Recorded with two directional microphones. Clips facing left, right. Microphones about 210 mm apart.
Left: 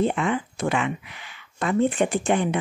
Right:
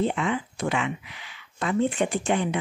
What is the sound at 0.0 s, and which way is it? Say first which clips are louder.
Speech: left 2 dB; 50° left (ahead or behind).